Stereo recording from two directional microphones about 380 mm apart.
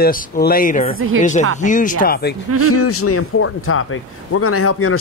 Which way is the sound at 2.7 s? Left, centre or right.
Left.